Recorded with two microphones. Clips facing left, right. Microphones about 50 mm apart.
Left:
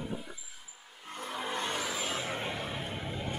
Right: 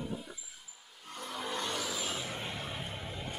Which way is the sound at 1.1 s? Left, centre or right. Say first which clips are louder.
Left 2 dB; left.